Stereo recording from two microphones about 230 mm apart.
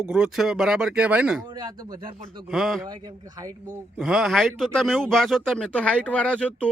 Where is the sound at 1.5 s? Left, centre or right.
Centre.